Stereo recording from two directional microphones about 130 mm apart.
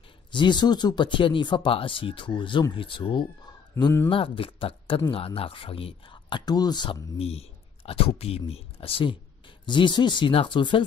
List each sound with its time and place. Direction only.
0.3 s speech: 35° left (ahead or behind)
3.8 s speech: 20° left (ahead or behind)
4.1 s speech: 45° left (ahead or behind)
6.4 s speech: 30° left (ahead or behind)
7.2 s speech: 50° left (ahead or behind)